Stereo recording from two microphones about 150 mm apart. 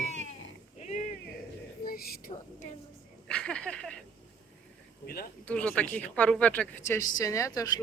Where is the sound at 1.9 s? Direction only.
90° left.